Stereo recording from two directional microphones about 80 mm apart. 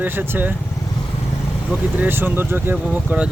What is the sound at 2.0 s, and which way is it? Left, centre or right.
Speech, right.